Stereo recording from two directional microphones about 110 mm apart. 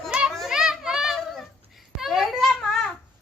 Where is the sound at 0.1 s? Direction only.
10° right (ahead or behind).